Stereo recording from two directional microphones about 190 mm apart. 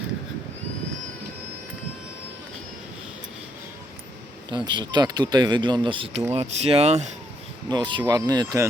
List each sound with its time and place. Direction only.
4.4 s speech: 25° right (ahead or behind)
7.7 s speech: 25° right (ahead or behind)